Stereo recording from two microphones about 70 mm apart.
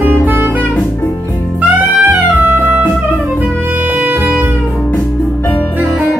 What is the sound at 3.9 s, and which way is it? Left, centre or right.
Music, right.